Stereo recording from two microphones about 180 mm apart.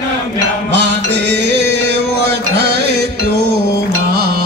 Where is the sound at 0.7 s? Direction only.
75° right (ahead or behind).